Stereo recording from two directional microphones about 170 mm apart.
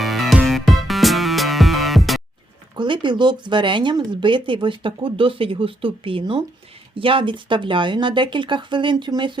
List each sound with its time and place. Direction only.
0.0 s music: centre (ahead or behind)
2.7 s speech: 30° right (ahead or behind)